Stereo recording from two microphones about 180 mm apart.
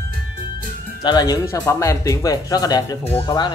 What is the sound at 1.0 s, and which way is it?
Speech, 20° left (ahead or behind).